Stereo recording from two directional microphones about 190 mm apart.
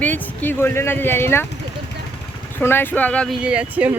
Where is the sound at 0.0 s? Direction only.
10° left (ahead or behind).